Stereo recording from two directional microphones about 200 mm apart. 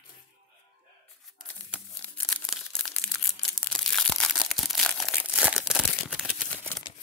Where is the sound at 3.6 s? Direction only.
5° left (ahead or behind).